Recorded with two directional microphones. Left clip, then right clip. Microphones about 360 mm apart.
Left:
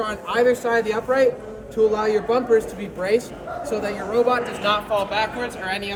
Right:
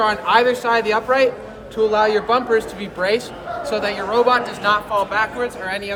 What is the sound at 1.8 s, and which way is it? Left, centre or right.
Speech, centre.